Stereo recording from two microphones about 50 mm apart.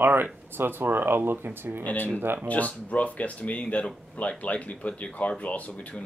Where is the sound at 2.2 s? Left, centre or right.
Right.